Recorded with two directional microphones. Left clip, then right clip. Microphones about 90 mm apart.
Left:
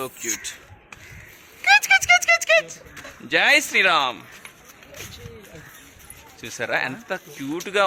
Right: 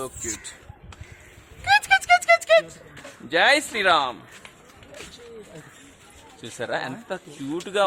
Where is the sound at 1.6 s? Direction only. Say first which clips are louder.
Left 3 dB; 75° left (ahead or behind); by 2.8 s 60° left (ahead or behind).